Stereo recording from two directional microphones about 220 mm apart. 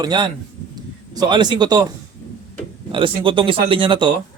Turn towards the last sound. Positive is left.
turn(degrees=-20)  # may be behind; listen again after turning